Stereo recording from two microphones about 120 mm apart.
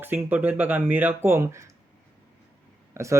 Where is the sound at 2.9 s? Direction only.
25° right (ahead or behind).